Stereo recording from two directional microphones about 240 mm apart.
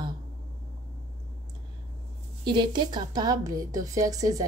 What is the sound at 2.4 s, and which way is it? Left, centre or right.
A woman's voice, centre.